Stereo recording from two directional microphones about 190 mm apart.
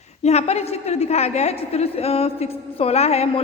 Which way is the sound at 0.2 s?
35° left (ahead or behind).